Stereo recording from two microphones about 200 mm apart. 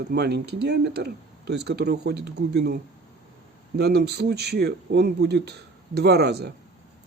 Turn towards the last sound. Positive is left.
turn(degrees=-55)  # may be behind; listen again after turning